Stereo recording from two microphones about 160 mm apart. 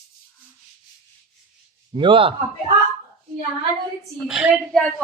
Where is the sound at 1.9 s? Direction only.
30° right (ahead or behind).